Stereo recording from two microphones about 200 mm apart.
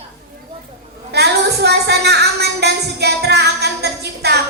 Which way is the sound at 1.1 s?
55° right (ahead or behind).